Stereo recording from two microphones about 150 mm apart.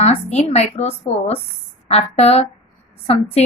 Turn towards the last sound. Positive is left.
turn(degrees=45)  # may be behind; listen again after turning